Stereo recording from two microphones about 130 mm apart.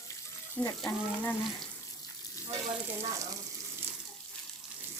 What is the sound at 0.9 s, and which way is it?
Speech, 15° left (ahead or behind).